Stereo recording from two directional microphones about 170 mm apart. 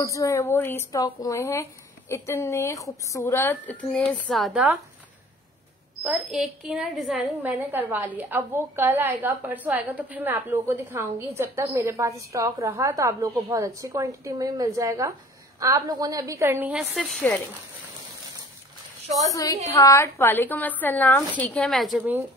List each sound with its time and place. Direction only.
0.0 s speech: 20° left (ahead or behind)
4.3 s a woman's voice: centre (ahead or behind)
6.0 s a woman's voice: 5° right (ahead or behind)
19.3 s a woman's voice: 20° left (ahead or behind); by 21.9 s centre (ahead or behind)